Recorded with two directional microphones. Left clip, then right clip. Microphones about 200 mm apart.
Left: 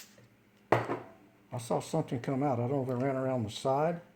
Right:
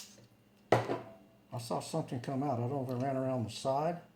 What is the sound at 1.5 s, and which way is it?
Speech, 40° left (ahead or behind).